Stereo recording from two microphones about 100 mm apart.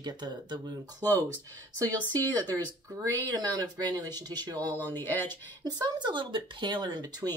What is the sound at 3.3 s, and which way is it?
Speech, 45° right (ahead or behind).